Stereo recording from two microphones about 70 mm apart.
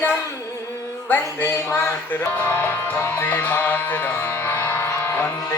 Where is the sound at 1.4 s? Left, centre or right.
Left.